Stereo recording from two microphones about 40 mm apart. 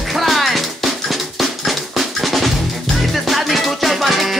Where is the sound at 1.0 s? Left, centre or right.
Centre.